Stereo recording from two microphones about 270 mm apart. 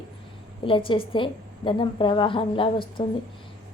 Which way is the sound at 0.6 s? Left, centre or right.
Centre.